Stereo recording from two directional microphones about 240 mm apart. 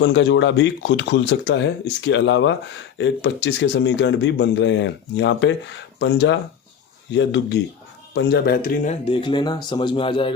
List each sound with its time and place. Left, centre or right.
0.0 s speech: left